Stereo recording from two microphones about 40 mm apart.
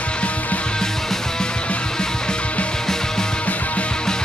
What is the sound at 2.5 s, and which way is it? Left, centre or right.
Music, left.